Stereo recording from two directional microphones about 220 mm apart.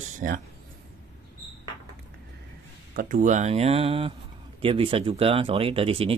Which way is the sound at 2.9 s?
35° right (ahead or behind).